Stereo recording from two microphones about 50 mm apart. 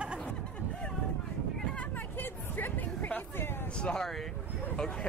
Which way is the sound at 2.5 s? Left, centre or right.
Left.